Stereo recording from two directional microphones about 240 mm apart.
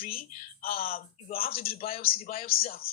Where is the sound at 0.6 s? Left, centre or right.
Left.